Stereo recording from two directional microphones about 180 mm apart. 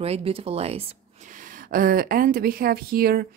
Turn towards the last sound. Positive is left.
turn(degrees=-55)  # may be behind; listen again after turning